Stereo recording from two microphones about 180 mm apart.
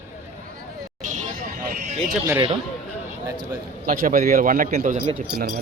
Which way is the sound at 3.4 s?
50° right (ahead or behind).